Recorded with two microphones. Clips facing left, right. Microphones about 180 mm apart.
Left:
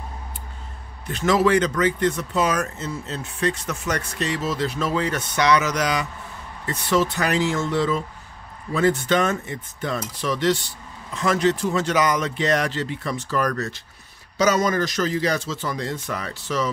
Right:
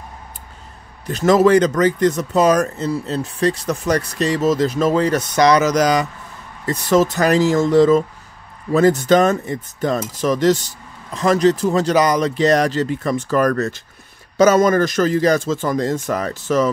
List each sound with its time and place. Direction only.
1.0 s speech: 40° right (ahead or behind)